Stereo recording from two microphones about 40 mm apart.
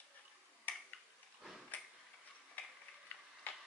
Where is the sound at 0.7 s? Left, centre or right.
Left.